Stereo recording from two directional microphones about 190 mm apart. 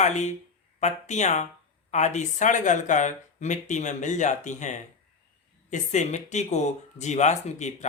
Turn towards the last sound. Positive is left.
turn(degrees=35)  # may be behind; listen again after turning